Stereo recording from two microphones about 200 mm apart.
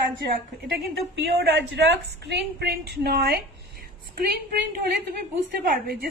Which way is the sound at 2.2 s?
55° right (ahead or behind).